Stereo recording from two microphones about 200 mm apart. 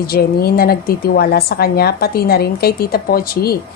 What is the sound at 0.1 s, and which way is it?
A woman's voice, 50° left (ahead or behind).